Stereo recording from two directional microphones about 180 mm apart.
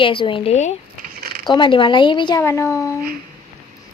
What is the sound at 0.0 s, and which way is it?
Speech, 30° left (ahead or behind).